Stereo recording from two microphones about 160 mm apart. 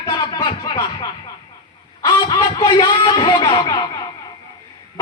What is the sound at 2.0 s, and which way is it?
Fowl, 30° left (ahead or behind).